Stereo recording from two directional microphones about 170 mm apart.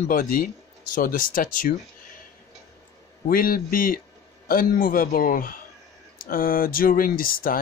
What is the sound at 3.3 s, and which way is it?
Speech, 60° left (ahead or behind).